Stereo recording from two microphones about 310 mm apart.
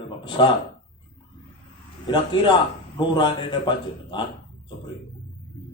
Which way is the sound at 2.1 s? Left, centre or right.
Centre.